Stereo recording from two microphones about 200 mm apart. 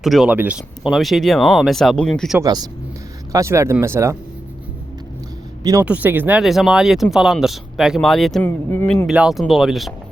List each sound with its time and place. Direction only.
0.0 s speech: centre (ahead or behind)
2.4 s speech: 20° right (ahead or behind)
5.8 s speech: 10° right (ahead or behind); by 9.0 s 10° left (ahead or behind)
9.0 s speech: centre (ahead or behind)